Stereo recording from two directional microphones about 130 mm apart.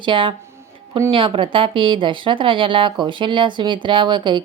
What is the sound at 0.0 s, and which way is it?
Speech, 40° right (ahead or behind).